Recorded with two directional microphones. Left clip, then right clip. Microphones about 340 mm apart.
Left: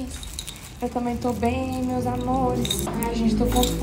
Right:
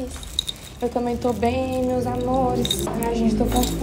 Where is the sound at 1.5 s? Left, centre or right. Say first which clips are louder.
Right 4 dB; centre.